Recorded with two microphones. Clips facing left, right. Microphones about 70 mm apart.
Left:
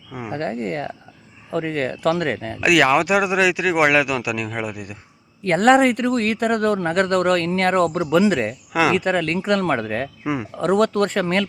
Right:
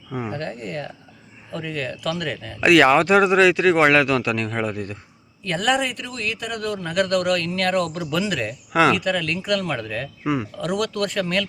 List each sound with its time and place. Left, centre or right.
0.1 s speech: centre
0.3 s speech: left
2.6 s speech: centre
5.4 s speech: left
10.2 s speech: left